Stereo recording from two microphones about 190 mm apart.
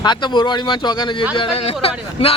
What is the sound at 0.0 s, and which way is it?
A man's voice, 25° left (ahead or behind).